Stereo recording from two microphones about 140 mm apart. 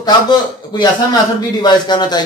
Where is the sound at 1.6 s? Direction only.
30° left (ahead or behind).